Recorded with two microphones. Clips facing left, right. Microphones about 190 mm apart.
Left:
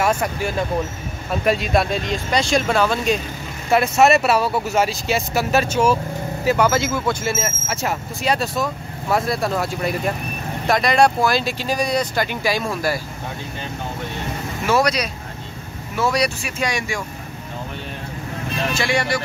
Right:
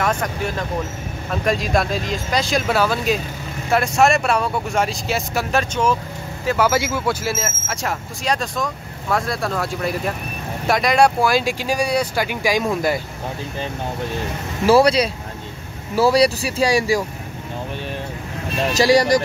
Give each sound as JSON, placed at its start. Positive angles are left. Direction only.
{"t": 0.0, "sound": "speech", "side_deg": 10}
{"t": 6.7, "sound": "speech", "side_deg": -10}
{"t": 10.7, "sound": "speech", "side_deg": -10}
{"t": 14.7, "sound": "speech", "side_deg": -30}
{"t": 18.7, "sound": "speech", "side_deg": -40}